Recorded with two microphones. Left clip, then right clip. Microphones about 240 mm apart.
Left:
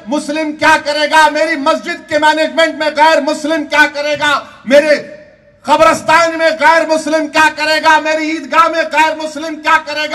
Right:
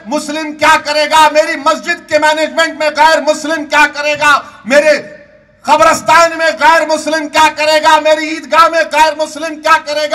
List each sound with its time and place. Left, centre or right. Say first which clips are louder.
0.1 s a man's voice: left 1 dB; right